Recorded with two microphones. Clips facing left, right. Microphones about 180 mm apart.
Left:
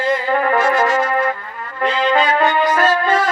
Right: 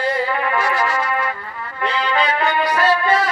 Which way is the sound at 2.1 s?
45° left (ahead or behind).